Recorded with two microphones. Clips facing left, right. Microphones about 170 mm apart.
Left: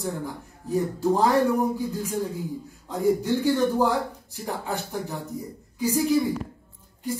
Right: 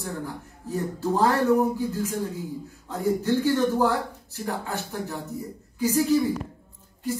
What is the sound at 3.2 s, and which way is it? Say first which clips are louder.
Speech: even; 15° left (ahead or behind).